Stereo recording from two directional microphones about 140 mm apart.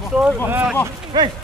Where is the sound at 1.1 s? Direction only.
30° right (ahead or behind).